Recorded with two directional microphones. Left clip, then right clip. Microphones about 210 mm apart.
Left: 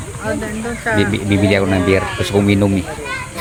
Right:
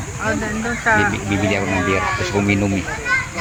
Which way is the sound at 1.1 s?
40° left (ahead or behind).